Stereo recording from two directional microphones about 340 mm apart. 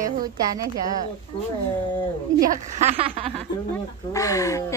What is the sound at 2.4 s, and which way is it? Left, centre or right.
Speech, right.